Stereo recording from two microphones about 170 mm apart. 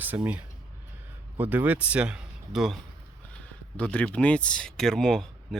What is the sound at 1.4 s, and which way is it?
A man's voice, 10° right (ahead or behind).